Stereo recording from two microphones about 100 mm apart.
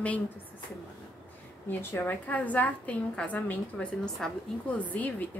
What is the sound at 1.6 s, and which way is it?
A woman's voice, 20° left (ahead or behind).